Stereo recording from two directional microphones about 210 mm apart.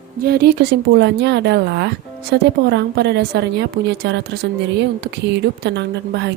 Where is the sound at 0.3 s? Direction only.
50° right (ahead or behind).